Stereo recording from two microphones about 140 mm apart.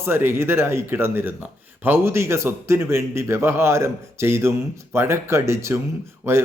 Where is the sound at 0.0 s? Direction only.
15° right (ahead or behind).